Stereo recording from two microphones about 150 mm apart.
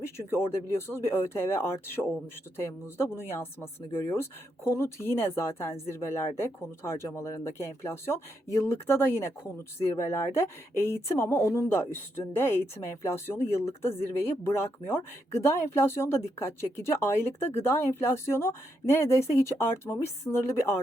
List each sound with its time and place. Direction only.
0.3 s speech: 15° left (ahead or behind)